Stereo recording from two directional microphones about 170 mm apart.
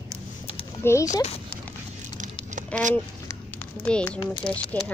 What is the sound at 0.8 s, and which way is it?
Speech, 15° left (ahead or behind).